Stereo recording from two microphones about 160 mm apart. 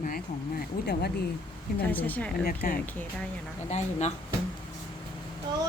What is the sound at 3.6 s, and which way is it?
Speech, 45° left (ahead or behind).